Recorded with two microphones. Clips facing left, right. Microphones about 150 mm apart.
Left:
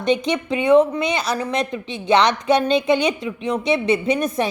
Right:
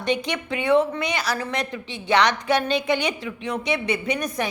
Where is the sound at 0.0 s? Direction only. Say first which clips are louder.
Left 5 dB; 20° left (ahead or behind).